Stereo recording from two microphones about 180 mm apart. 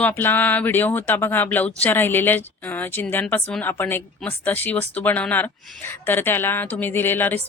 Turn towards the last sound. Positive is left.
turn(degrees=10)  # may be behind; listen again after turning